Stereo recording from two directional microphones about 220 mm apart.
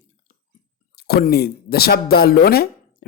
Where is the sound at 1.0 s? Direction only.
45° left (ahead or behind).